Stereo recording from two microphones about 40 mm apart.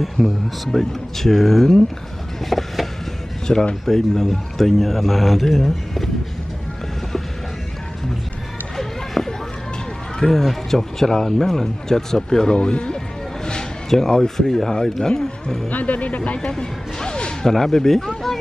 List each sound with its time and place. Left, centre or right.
0.2 s speech: centre
2.5 s vehicle: centre
3.5 s speech: centre
8.7 s run: centre
10.1 s speech: centre
12.5 s speech: left
13.8 s speech: centre
15.7 s speech: left
16.4 s speech: centre
17.5 s speech: centre